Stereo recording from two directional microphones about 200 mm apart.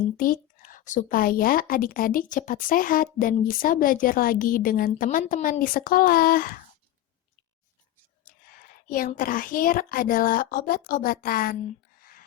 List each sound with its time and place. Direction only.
0.2 s a woman's voice: 45° left (ahead or behind)
8.9 s a woman's voice: 45° left (ahead or behind)